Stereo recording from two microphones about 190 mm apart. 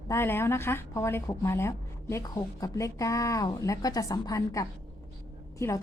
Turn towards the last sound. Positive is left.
turn(degrees=15)  # may be behind; listen again after turning